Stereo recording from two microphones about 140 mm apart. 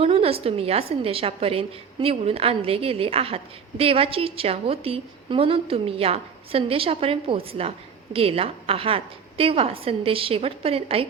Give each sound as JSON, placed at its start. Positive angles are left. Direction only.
{"t": 0.0, "sound": "a woman's voice", "side_deg": -45}